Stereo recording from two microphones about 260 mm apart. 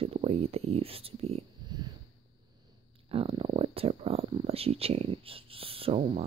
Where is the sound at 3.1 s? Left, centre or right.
Right.